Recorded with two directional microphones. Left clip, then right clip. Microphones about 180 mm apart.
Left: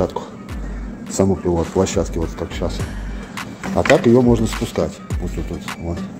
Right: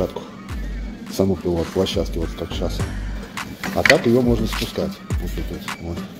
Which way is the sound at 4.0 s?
30° left (ahead or behind).